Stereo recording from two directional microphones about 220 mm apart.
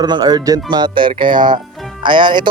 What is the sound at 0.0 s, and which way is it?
A man's voice, 20° right (ahead or behind).